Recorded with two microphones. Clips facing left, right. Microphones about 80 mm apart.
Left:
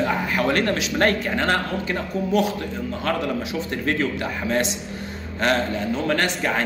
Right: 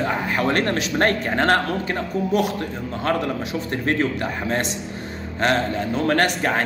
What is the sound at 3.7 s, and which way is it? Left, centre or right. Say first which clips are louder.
Speech: right 2 dB; right.